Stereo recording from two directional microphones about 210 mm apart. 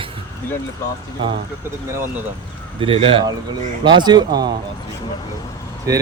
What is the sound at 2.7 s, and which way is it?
Speech, 25° right (ahead or behind).